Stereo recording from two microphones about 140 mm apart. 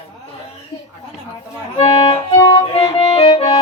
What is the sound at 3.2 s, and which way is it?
Music, 30° left (ahead or behind).